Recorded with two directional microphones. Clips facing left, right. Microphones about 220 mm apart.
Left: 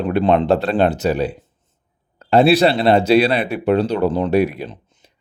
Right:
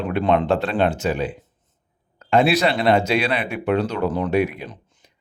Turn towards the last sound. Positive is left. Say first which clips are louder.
# left 4 dB
turn(degrees=35)  # may be behind; listen again after turning